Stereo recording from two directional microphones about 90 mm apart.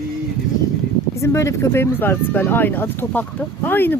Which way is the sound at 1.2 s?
35° left (ahead or behind).